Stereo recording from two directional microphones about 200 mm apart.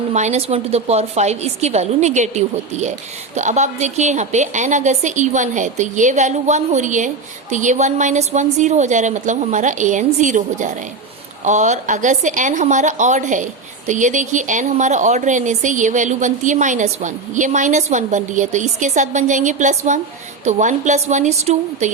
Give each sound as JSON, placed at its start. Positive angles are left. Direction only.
{"t": 0.1, "sound": "a woman's voice", "side_deg": -35}